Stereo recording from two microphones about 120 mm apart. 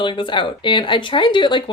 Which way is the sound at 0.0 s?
40° left (ahead or behind).